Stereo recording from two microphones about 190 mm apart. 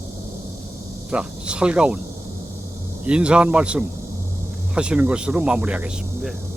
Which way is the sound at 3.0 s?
5° right (ahead or behind).